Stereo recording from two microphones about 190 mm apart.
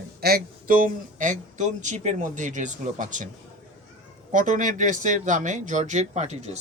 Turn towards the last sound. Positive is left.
turn(degrees=-35)  # may be behind; listen again after turning